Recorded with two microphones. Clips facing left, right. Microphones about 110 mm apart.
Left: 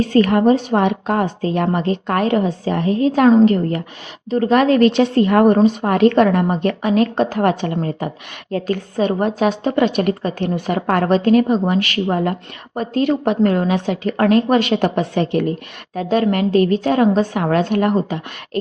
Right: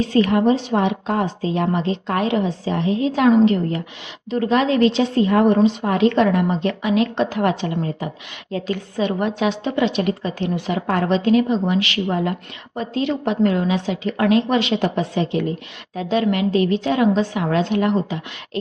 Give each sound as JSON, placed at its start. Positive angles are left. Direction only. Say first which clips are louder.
{"t": 0.0, "sound": "a woman's voice", "louder": "left 3 dB", "side_deg": 50}
{"t": 4.5, "sound": "a woman's voice", "louder": "left 4 dB", "side_deg": 55}